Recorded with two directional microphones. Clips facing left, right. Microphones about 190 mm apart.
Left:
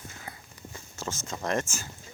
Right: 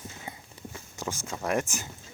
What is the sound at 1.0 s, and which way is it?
Speech, 15° right (ahead or behind).